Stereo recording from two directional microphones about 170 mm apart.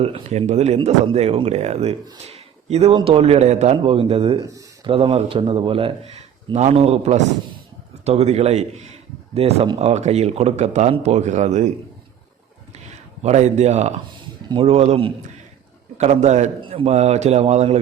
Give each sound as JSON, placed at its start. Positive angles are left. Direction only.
{"t": 0.0, "sound": "speech", "side_deg": -40}
{"t": 2.2, "sound": "a sound", "side_deg": -35}
{"t": 2.9, "sound": "speech", "side_deg": -35}
{"t": 4.4, "sound": "a sound", "side_deg": -20}
{"t": 4.9, "sound": "speech", "side_deg": -35}
{"t": 12.7, "sound": "a man's voice", "side_deg": -40}